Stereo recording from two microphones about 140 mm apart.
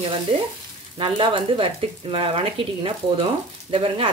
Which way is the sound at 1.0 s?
40° right (ahead or behind).